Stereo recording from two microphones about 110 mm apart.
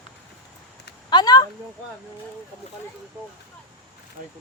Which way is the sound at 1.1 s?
40° left (ahead or behind).